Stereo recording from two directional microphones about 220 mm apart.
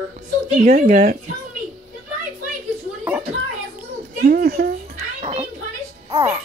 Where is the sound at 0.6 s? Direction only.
40° right (ahead or behind).